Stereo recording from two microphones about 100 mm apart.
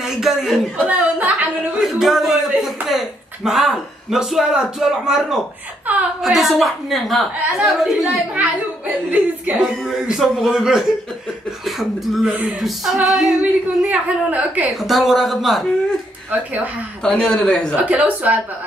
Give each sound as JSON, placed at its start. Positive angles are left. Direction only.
{"t": 0.0, "sound": "a man's voice", "side_deg": -5}
{"t": 0.8, "sound": "speech", "side_deg": -15}
{"t": 1.9, "sound": "a woman's voice", "side_deg": -5}
{"t": 8.4, "sound": "speech", "side_deg": -15}
{"t": 9.8, "sound": "a woman's voice", "side_deg": -5}
{"t": 14.8, "sound": "a woman's voice", "side_deg": 0}
{"t": 17.0, "sound": "speech", "side_deg": 10}
{"t": 17.7, "sound": "speech", "side_deg": -15}